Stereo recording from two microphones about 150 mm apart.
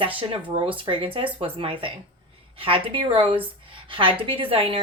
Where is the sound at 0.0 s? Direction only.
35° right (ahead or behind).